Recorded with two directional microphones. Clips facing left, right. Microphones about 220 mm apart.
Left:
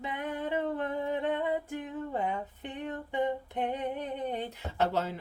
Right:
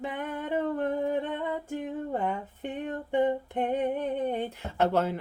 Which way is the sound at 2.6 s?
50° right (ahead or behind).